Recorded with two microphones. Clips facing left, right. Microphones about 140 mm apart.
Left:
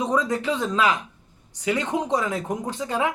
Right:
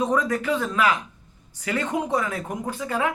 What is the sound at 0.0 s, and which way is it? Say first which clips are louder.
Speech: even; 20° left (ahead or behind).